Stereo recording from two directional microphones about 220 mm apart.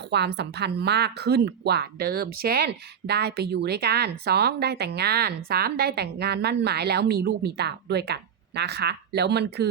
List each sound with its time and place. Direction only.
0.1 s a woman's voice: 50° right (ahead or behind)